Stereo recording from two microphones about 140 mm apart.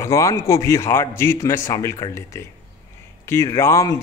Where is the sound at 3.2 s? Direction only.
20° left (ahead or behind).